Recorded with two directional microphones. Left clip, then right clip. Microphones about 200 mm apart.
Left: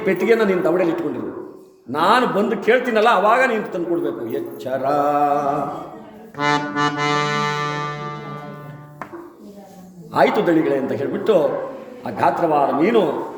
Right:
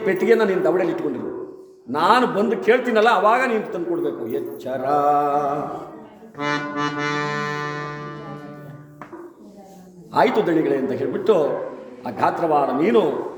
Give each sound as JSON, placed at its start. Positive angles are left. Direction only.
{"t": 0.0, "sound": "a man's voice", "side_deg": 5}
{"t": 6.3, "sound": "music", "side_deg": 40}
{"t": 10.1, "sound": "a man's voice", "side_deg": 5}